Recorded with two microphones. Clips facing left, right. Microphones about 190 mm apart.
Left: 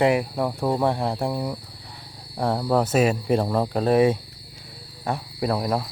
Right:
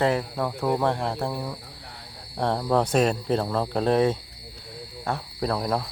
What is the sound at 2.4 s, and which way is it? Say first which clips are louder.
Speech: left 1 dB; 5° left (ahead or behind).